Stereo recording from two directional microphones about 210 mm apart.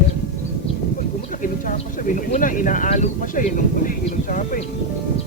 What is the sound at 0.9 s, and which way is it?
Speech, 40° left (ahead or behind).